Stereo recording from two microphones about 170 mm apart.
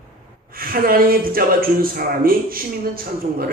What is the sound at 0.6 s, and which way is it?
Speech, 60° right (ahead or behind).